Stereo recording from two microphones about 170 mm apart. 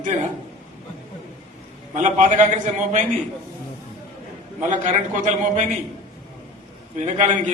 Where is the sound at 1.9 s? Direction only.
45° right (ahead or behind).